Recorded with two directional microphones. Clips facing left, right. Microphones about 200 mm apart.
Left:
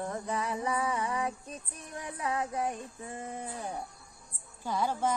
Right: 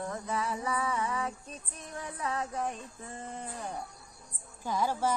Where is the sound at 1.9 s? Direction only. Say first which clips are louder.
Left 1 dB; 15° left (ahead or behind).